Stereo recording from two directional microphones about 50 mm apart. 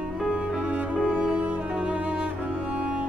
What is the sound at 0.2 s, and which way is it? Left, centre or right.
Cello, right.